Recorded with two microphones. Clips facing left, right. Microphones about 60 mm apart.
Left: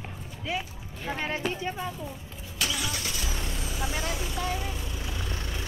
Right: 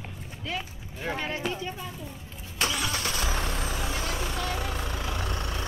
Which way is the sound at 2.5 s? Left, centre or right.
Right.